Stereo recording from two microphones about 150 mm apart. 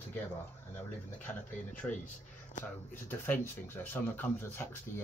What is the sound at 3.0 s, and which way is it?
Speech, 15° left (ahead or behind).